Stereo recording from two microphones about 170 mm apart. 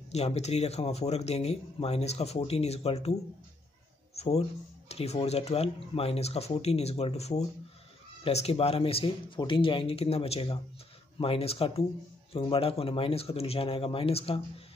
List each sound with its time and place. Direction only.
0.1 s speech: 40° left (ahead or behind)